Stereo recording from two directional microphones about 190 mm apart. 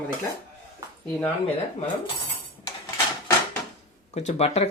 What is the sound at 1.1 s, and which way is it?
Speech, 10° left (ahead or behind).